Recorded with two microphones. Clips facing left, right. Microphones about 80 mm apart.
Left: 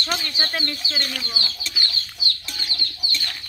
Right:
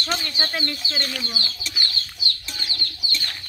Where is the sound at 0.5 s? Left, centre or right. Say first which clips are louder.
Even; centre.